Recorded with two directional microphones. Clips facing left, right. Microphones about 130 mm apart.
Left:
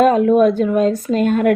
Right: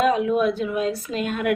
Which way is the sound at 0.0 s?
45° left (ahead or behind).